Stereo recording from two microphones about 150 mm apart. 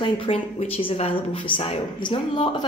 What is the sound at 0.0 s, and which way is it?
A woman's voice, 40° left (ahead or behind).